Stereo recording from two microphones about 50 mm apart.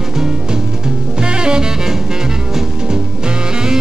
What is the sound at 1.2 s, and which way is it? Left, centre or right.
Music, centre.